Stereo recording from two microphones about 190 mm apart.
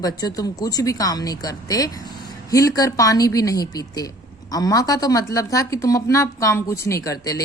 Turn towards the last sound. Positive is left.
turn(degrees=20)  # may be behind; listen again after turning